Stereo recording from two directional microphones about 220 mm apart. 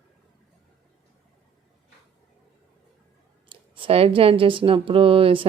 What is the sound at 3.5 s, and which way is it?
A woman's voice, 25° right (ahead or behind).